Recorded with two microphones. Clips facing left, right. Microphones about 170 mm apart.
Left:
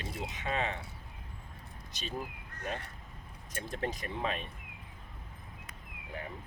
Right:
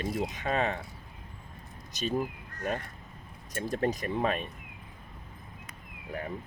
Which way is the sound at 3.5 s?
40° right (ahead or behind).